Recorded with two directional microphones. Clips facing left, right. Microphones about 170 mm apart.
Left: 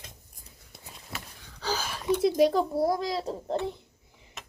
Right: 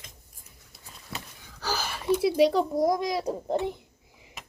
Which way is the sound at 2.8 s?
15° right (ahead or behind).